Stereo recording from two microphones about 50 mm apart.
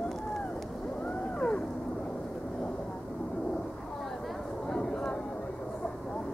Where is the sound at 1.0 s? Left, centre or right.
Left.